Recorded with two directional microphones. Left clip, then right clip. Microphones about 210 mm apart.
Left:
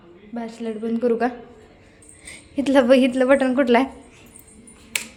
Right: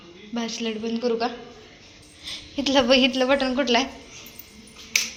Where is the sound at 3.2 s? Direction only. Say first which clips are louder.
Left 4 dB; 40° left (ahead or behind).